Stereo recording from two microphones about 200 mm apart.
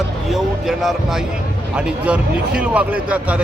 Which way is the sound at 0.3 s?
Centre (ahead or behind).